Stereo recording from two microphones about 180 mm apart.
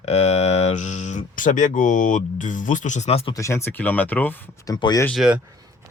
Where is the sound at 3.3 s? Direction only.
15° left (ahead or behind).